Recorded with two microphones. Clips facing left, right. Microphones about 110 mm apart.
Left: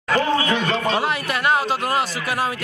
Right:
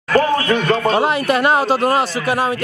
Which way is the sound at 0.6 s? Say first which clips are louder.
Right 5 dB; 50° right (ahead or behind).